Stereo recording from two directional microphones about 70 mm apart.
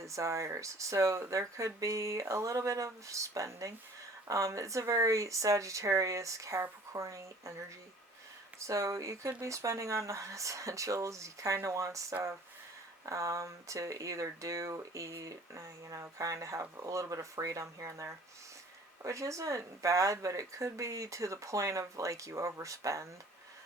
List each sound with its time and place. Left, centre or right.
0.0 s speech: right
8.5 s speech: right
13.1 s speech: right